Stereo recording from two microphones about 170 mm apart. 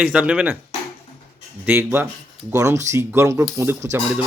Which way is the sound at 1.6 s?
10° right (ahead or behind).